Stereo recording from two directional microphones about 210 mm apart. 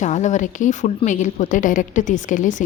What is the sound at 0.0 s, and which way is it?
A woman's voice, 35° left (ahead or behind).